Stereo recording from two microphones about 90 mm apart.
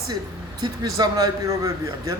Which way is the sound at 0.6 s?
45° right (ahead or behind).